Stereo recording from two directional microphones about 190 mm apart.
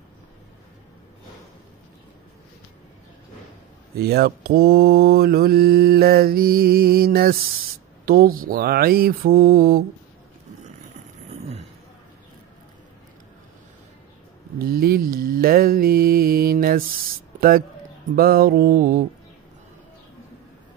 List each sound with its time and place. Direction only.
3.9 s mantra: 55° right (ahead or behind)
14.6 s mantra: 50° right (ahead or behind)